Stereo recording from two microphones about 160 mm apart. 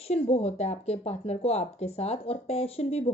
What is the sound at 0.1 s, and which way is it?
Speech, 40° left (ahead or behind).